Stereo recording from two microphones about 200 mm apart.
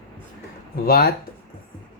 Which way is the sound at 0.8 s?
50° left (ahead or behind).